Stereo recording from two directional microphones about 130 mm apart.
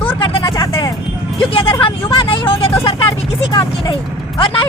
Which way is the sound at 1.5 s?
40° left (ahead or behind).